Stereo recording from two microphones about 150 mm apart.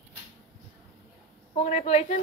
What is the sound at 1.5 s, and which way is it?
Speech, 45° left (ahead or behind).